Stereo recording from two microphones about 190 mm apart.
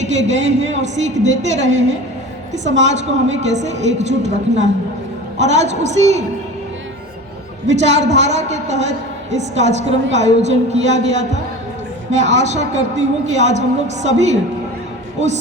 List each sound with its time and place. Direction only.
0.3 s a woman's voice: 35° right (ahead or behind)
7.7 s a woman's voice: 35° right (ahead or behind)